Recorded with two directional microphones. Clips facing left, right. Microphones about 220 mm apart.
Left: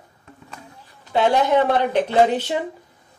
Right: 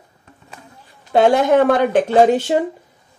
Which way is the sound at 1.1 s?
50° right (ahead or behind).